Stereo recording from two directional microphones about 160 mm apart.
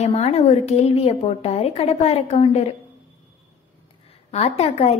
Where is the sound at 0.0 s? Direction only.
40° left (ahead or behind).